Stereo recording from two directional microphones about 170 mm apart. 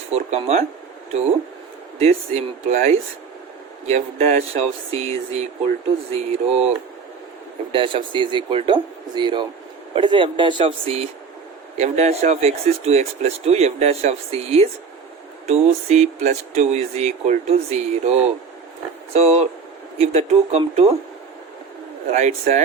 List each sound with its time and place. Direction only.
0.1 s speech: 40° right (ahead or behind)
2.0 s speech: 40° right (ahead or behind)
7.7 s speech: 30° right (ahead or behind)
22.1 s speech: 40° right (ahead or behind)